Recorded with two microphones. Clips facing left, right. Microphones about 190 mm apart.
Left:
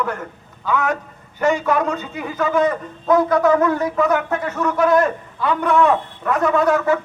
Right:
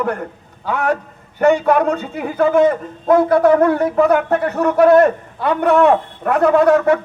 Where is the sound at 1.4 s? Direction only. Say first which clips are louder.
Right 5 dB; 60° right (ahead or behind).